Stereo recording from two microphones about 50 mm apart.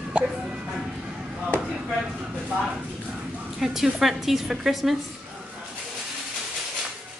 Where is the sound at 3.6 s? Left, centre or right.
Centre.